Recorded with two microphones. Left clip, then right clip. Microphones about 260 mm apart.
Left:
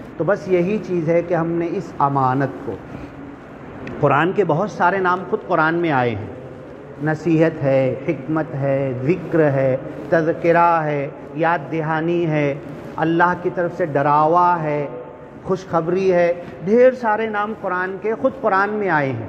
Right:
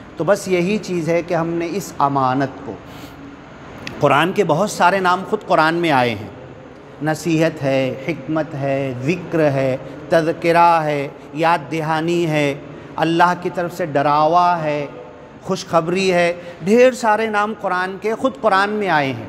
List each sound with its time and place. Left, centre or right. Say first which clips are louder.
0.2 s a man's voice: right 1 dB; right
4.0 s a man's voice: right 2 dB; right